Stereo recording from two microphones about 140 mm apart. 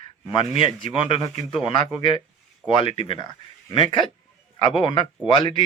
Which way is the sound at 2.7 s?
40° left (ahead or behind).